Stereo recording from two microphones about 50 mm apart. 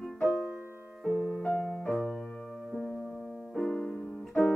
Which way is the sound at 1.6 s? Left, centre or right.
Centre.